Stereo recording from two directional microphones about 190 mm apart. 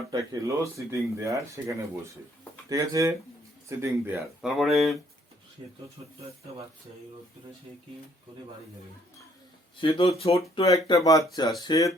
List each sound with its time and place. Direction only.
0.1 s speech: 20° right (ahead or behind); by 4.9 s centre (ahead or behind)
9.8 s speech: 30° left (ahead or behind)
10.8 s speech: 20° left (ahead or behind)